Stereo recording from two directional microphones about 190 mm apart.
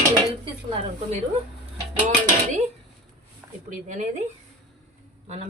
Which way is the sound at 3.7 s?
40° right (ahead or behind).